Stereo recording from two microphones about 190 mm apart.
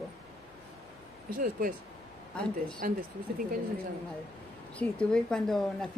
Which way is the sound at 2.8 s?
50° right (ahead or behind).